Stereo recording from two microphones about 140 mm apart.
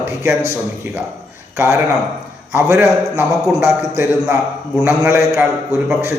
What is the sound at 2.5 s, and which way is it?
A man's voice, 15° right (ahead or behind).